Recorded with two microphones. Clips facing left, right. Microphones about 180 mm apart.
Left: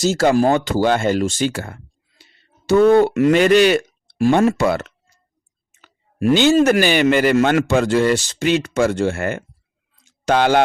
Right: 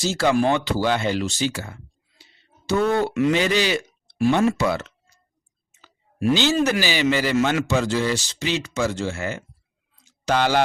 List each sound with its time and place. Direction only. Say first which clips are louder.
0.0 s speech: left 5 dB; 45° left (ahead or behind)
5.7 s clicking: left 2 dB; 55° left (ahead or behind)
6.7 s a man's voice: left 6 dB; 55° left (ahead or behind)
10.0 s a sound: left 5 dB; 55° left (ahead or behind)